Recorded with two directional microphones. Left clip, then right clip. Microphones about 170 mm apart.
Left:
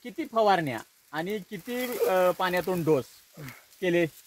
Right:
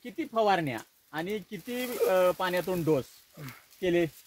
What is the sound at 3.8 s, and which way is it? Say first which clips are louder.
Speech: left 2 dB; 55° left (ahead or behind).